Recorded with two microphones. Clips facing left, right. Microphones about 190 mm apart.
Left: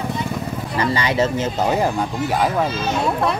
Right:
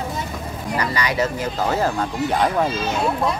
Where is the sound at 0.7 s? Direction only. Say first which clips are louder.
Left 2 dB; 25° left (ahead or behind).